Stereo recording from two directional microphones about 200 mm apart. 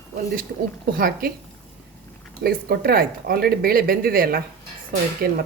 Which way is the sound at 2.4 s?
50° right (ahead or behind).